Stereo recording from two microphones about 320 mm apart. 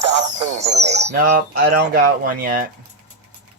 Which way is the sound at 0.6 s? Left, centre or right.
Right.